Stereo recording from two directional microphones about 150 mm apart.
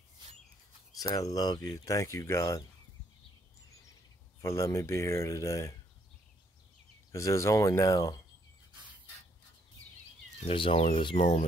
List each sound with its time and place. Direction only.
0.9 s speech: 25° left (ahead or behind)
4.4 s speech: 20° left (ahead or behind)
7.1 s speech: 20° left (ahead or behind)
10.4 s speech: 35° left (ahead or behind)
11.1 s speech: 50° left (ahead or behind)